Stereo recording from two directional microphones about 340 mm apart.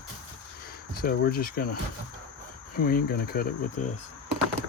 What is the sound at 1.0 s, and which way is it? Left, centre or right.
Speech, left.